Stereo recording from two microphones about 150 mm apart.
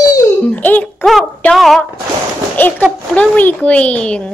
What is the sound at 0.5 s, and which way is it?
A child's voice, 10° left (ahead or behind).